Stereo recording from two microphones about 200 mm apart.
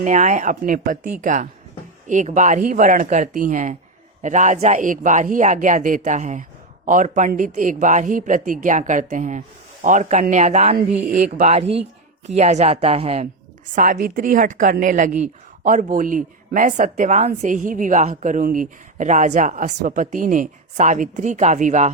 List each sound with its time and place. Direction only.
0.0 s a woman's voice: 40° right (ahead or behind)
13.7 s a woman's voice: 40° right (ahead or behind)